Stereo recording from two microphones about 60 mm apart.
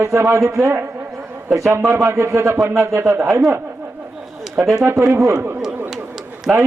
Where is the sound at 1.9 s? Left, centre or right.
Right.